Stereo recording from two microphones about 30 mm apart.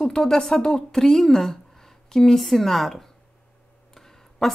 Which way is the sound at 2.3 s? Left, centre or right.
Centre.